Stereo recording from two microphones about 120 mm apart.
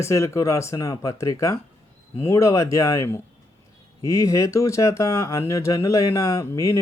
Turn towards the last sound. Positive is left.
turn(degrees=30)  # may be behind; listen again after turning